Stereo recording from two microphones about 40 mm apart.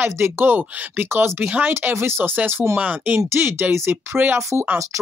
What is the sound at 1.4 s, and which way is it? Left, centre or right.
Speech, right.